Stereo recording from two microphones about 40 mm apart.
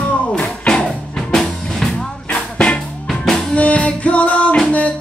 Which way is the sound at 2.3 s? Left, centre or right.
Left.